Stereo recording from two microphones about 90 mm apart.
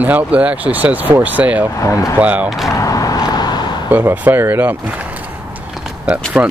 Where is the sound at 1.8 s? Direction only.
35° left (ahead or behind).